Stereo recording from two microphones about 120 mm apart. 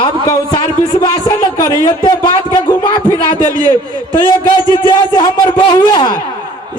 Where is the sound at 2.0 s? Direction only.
40° left (ahead or behind).